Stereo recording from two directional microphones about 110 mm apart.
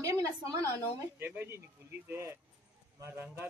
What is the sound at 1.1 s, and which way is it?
A woman's voice, 20° right (ahead or behind).